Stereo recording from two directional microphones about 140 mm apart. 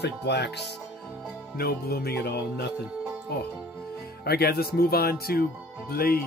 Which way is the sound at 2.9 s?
5° right (ahead or behind).